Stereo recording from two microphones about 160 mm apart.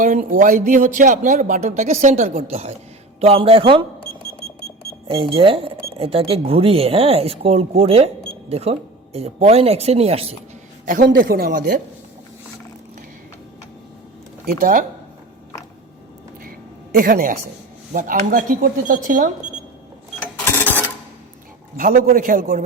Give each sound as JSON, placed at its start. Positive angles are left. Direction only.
{"t": 0.0, "sound": "speech", "side_deg": -55}
{"t": 5.1, "sound": "speech", "side_deg": -35}
{"t": 10.8, "sound": "speech", "side_deg": -60}
{"t": 14.4, "sound": "speech", "side_deg": -60}
{"t": 16.4, "sound": "a sound", "side_deg": -65}
{"t": 17.9, "sound": "speech", "side_deg": -55}
{"t": 20.2, "sound": "cash register", "side_deg": 15}
{"t": 21.8, "sound": "speech", "side_deg": -60}